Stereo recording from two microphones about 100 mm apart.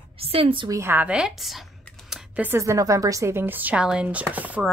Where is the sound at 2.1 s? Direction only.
10° right (ahead or behind).